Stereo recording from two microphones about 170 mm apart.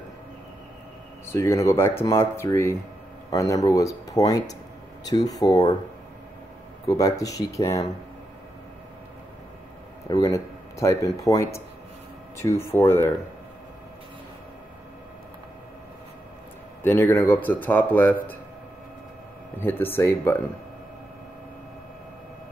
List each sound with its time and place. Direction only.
1.2 s speech: 15° left (ahead or behind)
6.9 s speech: 20° left (ahead or behind)
10.0 s speech: 20° left (ahead or behind)
16.8 s speech: 15° left (ahead or behind)
19.6 s speech: 10° left (ahead or behind)